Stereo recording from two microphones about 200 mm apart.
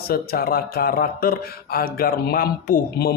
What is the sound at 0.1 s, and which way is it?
Speech, 50° left (ahead or behind).